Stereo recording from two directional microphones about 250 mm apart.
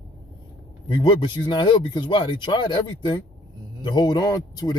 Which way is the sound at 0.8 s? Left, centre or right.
Centre.